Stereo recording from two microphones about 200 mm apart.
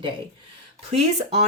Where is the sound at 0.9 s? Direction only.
30° right (ahead or behind).